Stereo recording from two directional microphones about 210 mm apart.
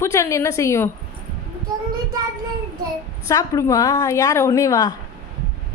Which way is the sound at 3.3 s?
15° left (ahead or behind).